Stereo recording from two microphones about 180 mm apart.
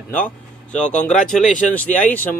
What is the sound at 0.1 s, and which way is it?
A man's voice, 10° left (ahead or behind).